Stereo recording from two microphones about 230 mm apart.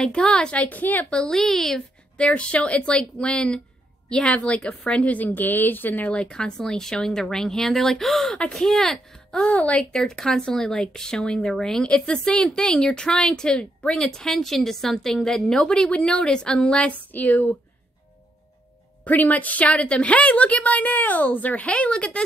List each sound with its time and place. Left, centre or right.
0.0 s a woman's voice: centre
19.0 s a woman's voice: centre